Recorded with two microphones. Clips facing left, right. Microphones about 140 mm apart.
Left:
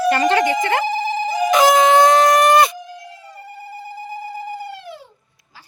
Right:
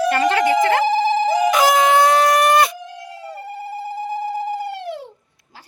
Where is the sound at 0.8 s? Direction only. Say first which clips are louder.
Right 4 dB; 90° right.